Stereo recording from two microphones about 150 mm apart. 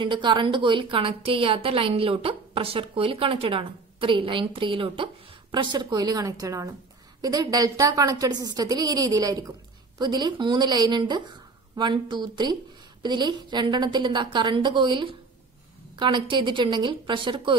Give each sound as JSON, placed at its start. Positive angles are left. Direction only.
{"t": 0.0, "sound": "a woman's voice", "side_deg": -30}